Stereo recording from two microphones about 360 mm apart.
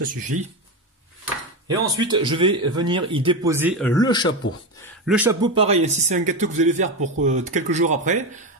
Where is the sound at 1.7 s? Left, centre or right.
Centre.